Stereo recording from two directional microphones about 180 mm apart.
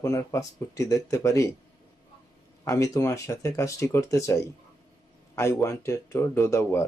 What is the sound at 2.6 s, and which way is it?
Speech, 15° left (ahead or behind).